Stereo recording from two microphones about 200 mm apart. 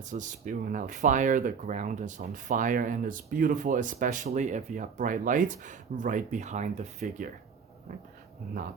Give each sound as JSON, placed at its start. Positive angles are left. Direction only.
{"t": 0.0, "sound": "speech", "side_deg": -40}